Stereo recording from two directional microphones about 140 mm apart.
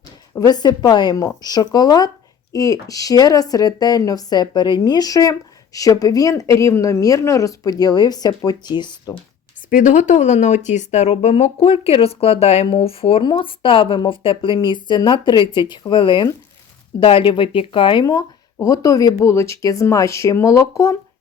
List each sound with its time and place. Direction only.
0.3 s speech: 30° left (ahead or behind)
9.6 s speech: 65° left (ahead or behind); by 18.0 s 35° left (ahead or behind)
18.0 s speech: 25° left (ahead or behind)